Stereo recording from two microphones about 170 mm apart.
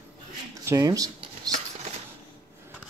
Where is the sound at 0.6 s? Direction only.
20° right (ahead or behind).